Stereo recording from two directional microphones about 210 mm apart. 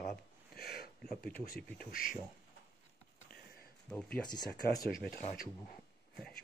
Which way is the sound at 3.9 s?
5° left (ahead or behind).